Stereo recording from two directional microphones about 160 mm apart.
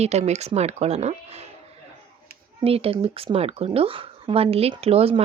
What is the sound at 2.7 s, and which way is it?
A woman's voice, 40° right (ahead or behind).